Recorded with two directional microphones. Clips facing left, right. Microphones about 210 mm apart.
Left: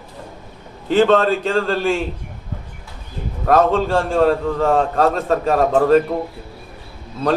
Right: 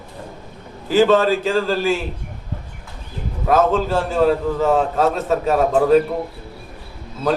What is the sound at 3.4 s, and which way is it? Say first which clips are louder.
A man's voice: left 1 dB; 5° right (ahead or behind).